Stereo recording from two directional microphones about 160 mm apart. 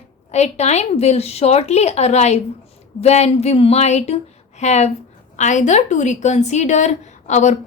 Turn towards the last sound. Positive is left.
turn(degrees=45)  # may be behind; listen again after turning